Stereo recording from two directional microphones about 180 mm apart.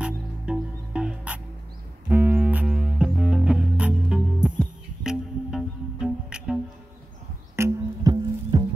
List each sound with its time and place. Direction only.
0.0 s music: 5° right (ahead or behind)
7.5 s music: 20° right (ahead or behind)